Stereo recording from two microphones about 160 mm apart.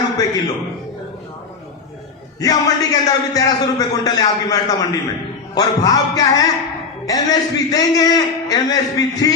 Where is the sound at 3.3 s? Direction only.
25° left (ahead or behind).